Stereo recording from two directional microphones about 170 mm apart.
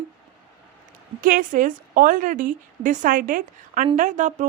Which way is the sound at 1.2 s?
55° right (ahead or behind).